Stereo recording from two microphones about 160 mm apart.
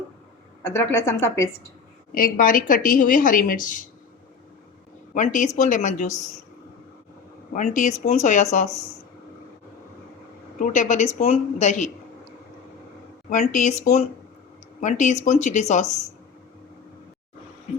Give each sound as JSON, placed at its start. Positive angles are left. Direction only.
{"t": 0.6, "sound": "a woman's voice", "side_deg": 15}
{"t": 2.1, "sound": "a woman's voice", "side_deg": 65}
{"t": 5.1, "sound": "speech", "side_deg": 55}
{"t": 7.5, "sound": "speech", "side_deg": 50}
{"t": 10.6, "sound": "speech", "side_deg": 50}
{"t": 13.3, "sound": "speech", "side_deg": 50}